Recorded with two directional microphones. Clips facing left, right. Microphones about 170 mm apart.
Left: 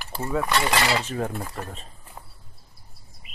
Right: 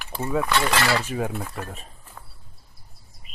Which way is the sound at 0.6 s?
20° left (ahead or behind).